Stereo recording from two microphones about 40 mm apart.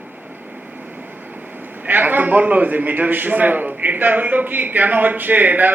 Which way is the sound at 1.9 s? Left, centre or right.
Right.